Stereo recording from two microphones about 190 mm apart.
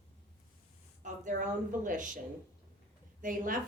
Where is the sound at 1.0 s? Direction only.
40° right (ahead or behind).